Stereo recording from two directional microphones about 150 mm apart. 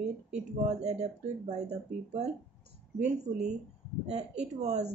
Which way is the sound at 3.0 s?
50° right (ahead or behind).